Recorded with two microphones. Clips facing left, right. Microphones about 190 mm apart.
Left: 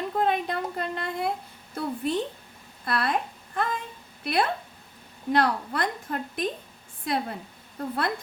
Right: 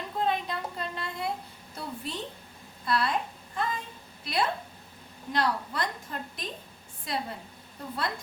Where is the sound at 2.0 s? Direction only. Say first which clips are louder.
Left 9 dB; 55° left (ahead or behind).